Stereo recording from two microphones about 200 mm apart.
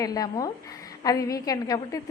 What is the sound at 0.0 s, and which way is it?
A woman's voice, 20° left (ahead or behind).